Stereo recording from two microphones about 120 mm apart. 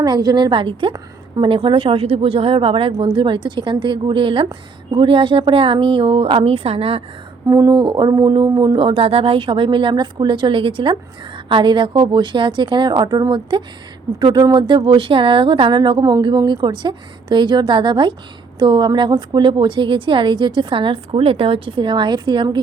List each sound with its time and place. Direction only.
0.0 s a woman's voice: 35° right (ahead or behind); by 7.0 s 50° right (ahead or behind)
7.4 s a woman's voice: 30° right (ahead or behind)